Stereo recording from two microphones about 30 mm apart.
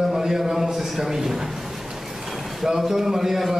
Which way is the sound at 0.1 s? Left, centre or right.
Centre.